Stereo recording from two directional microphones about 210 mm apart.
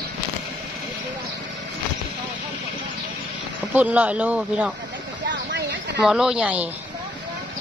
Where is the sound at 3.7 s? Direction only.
5° right (ahead or behind).